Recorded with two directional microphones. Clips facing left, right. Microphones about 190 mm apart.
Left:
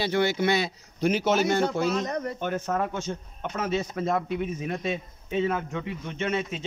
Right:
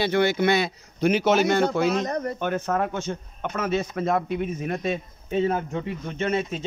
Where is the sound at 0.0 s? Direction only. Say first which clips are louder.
Right 3 dB; 60° right (ahead or behind).